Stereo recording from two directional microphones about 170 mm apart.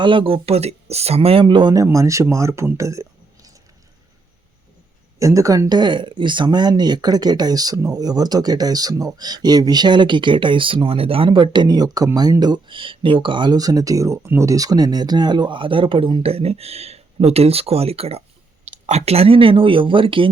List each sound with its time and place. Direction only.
0.0 s speech: 30° right (ahead or behind)
5.2 s speech: 20° right (ahead or behind)